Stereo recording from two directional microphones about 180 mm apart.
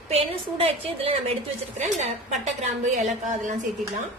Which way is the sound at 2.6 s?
40° right (ahead or behind).